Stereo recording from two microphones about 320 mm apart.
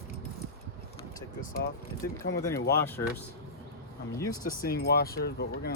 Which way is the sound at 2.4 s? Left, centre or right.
Centre.